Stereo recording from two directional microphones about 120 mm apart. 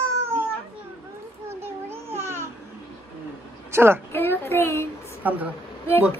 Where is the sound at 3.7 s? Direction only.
20° right (ahead or behind).